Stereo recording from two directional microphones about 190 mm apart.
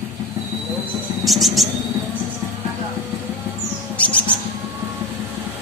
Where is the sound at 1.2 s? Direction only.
Centre (ahead or behind).